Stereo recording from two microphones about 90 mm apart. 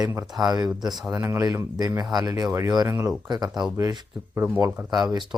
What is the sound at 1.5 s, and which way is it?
Speech, 45° right (ahead or behind).